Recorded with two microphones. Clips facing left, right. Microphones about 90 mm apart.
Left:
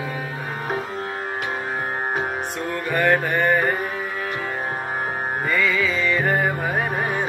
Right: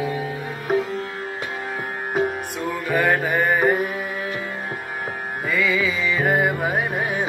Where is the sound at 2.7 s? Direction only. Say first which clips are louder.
Even; 5° right (ahead or behind).